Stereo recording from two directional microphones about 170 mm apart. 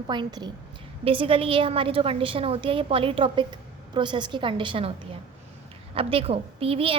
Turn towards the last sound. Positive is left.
turn(degrees=-30)  # may be behind; listen again after turning